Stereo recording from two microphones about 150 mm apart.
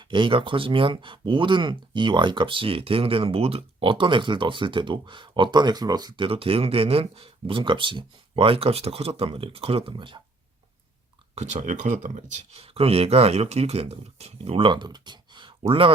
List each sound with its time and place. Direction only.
0.1 s speech: 35° right (ahead or behind)
11.3 s speech: 55° right (ahead or behind); by 15.9 s 35° right (ahead or behind)